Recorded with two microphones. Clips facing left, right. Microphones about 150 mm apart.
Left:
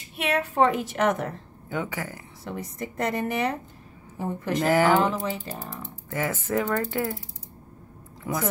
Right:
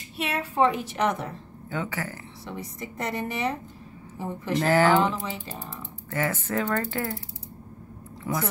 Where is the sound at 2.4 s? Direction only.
50° left (ahead or behind).